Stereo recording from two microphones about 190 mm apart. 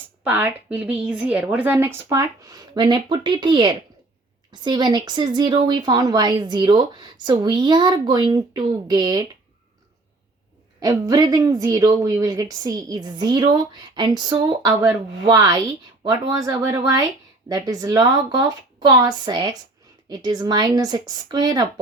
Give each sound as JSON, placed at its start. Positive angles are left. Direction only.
{"t": 0.3, "sound": "a woman's voice", "side_deg": -10}
{"t": 10.8, "sound": "a woman's voice", "side_deg": -20}